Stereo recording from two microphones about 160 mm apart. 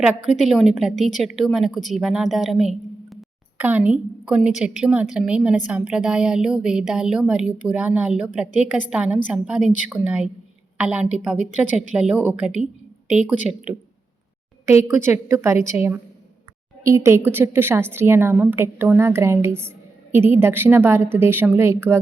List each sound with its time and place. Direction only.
0.4 s a woman's voice: centre (ahead or behind)
14.7 s a woman's voice: 15° right (ahead or behind)